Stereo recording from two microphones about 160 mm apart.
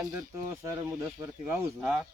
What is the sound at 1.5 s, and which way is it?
Speech, 10° right (ahead or behind).